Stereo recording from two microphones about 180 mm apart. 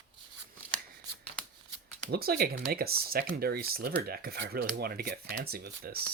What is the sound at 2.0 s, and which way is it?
Speech, 60° right (ahead or behind).